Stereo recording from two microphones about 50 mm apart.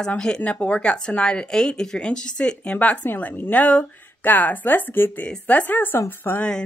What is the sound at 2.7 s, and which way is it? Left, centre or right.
Speech, left.